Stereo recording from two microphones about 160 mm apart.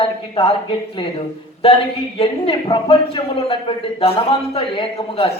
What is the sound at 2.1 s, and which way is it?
A man's voice, 30° left (ahead or behind).